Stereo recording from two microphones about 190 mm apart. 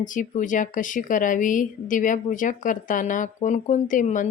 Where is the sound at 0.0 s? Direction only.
45° left (ahead or behind).